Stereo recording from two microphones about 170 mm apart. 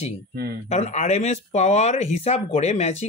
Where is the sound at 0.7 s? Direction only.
40° left (ahead or behind).